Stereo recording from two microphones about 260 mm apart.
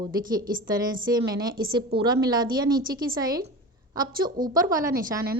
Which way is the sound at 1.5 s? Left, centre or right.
Right.